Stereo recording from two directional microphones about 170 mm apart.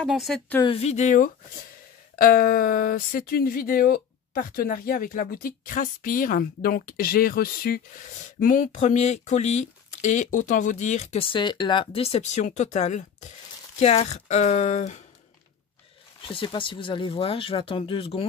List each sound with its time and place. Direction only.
0.0 s speech: centre (ahead or behind)
0.7 s speech: 40° left (ahead or behind)
16.2 s speech: 30° left (ahead or behind)